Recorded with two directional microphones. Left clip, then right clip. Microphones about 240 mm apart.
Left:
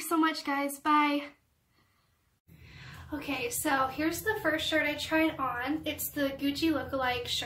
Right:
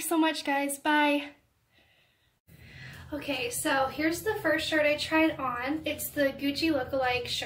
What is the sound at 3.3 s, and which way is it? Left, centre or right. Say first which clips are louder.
A woman's voice: right 1 dB; centre.